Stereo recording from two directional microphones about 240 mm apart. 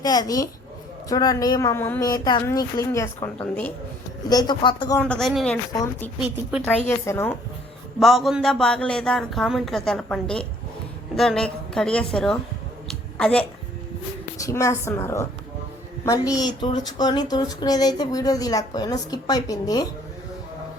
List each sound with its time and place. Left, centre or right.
0.0 s speech: centre
4.9 s speech: centre
5.7 s speech: centre
7.9 s speech: centre
12.9 s a sound: centre
14.3 s speech: centre